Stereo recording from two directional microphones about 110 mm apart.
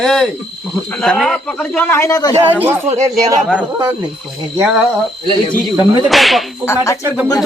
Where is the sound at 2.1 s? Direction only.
30° left (ahead or behind).